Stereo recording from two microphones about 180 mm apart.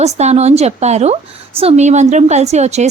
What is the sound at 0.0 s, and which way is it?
A woman's voice, 40° right (ahead or behind).